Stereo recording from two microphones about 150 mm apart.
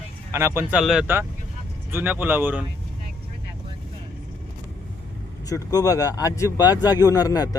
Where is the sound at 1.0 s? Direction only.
15° right (ahead or behind).